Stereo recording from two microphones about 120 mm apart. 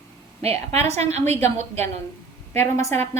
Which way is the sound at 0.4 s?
60° right (ahead or behind).